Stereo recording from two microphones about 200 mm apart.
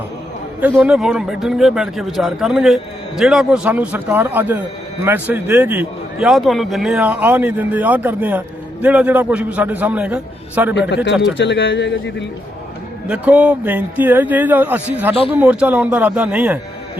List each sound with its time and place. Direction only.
0.8 s a man's voice: centre (ahead or behind)
10.8 s speech: 60° left (ahead or behind)
13.1 s a man's voice: 5° right (ahead or behind)